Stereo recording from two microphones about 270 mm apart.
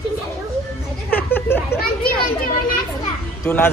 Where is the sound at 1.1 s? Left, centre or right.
Centre.